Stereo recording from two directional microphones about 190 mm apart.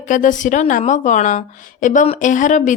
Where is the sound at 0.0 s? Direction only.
40° left (ahead or behind).